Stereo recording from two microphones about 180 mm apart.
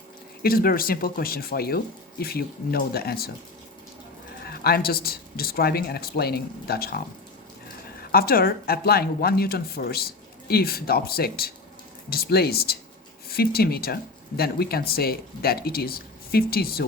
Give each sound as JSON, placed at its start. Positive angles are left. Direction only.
{"t": 0.4, "sound": "speech", "side_deg": 55}
{"t": 4.4, "sound": "speech", "side_deg": 60}
{"t": 8.1, "sound": "speech", "side_deg": 55}